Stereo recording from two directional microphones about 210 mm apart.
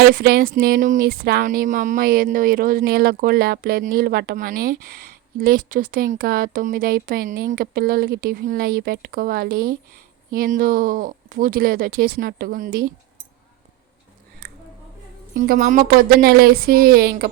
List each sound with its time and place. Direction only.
0.0 s speech: 45° right (ahead or behind)
15.4 s speech: 40° right (ahead or behind)